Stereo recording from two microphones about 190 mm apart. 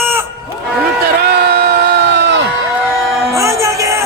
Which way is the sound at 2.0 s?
65° right (ahead or behind).